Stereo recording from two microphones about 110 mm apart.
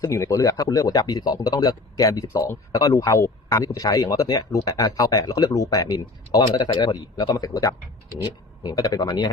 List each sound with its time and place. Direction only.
0.0 s speech: 25° left (ahead or behind)